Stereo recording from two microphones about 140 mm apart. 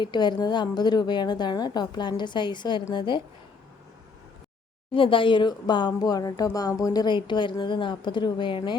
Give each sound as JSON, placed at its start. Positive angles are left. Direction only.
{"t": 0.0, "sound": "speech", "side_deg": 30}
{"t": 4.9, "sound": "speech", "side_deg": 35}